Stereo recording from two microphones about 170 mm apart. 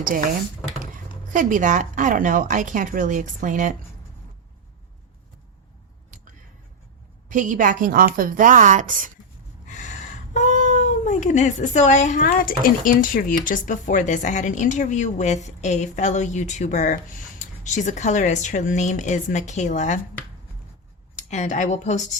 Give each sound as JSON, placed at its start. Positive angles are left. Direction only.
{"t": 0.0, "sound": "speech", "side_deg": -50}
{"t": 1.3, "sound": "speech", "side_deg": -50}
{"t": 7.3, "sound": "speech", "side_deg": -50}
{"t": 9.6, "sound": "speech", "side_deg": 45}
{"t": 21.2, "sound": "speech", "side_deg": 45}